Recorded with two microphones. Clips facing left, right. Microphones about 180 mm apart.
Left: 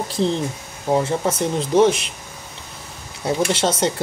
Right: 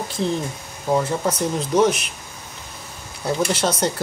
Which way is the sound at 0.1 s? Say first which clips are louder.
Left 3 dB; 30° left (ahead or behind).